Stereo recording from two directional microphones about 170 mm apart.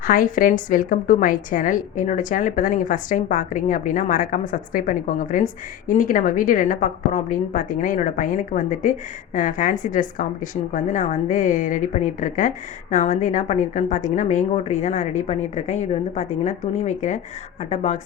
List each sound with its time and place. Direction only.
0.0 s a woman's voice: 55° left (ahead or behind)